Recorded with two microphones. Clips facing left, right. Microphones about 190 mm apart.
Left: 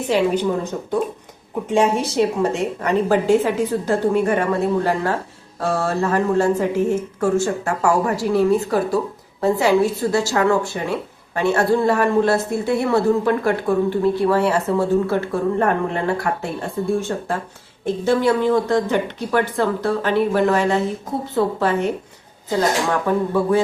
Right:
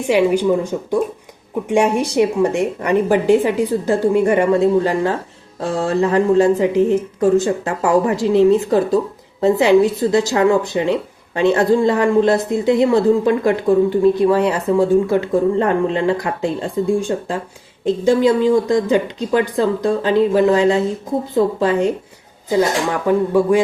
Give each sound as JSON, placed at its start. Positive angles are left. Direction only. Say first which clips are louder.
{"t": 0.0, "sound": "a woman's voice", "louder": "right 4 dB", "side_deg": -10}
{"t": 23.0, "sound": "a woman's voice", "louder": "right 7 dB", "side_deg": -15}